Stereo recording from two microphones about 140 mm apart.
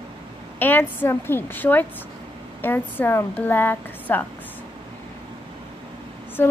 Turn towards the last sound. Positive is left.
turn(degrees=15)  # may be behind; listen again after turning